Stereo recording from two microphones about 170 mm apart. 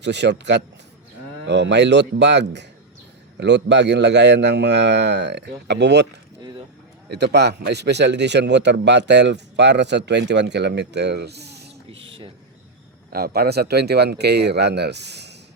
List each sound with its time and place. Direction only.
0.0 s speech: 90° right
7.1 s speech: 75° right (ahead or behind)
13.1 s speech: 65° right (ahead or behind); by 15.4 s 80° right